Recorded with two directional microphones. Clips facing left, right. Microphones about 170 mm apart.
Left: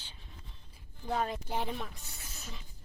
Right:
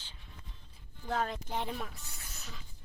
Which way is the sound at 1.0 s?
5° left (ahead or behind).